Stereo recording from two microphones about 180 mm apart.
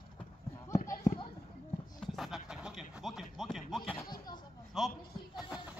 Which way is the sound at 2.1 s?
Centre (ahead or behind).